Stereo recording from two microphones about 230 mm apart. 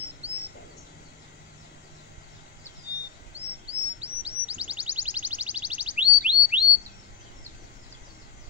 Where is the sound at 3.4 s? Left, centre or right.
Right.